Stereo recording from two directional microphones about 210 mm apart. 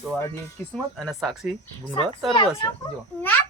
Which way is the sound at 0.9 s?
Centre (ahead or behind).